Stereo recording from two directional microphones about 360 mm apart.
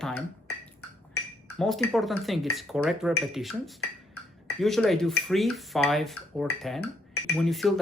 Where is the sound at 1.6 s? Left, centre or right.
Centre.